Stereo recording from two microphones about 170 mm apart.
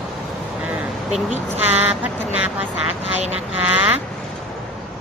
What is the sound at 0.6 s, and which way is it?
Vehicle, 10° right (ahead or behind).